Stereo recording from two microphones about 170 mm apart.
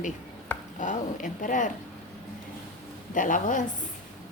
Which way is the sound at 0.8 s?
50° left (ahead or behind).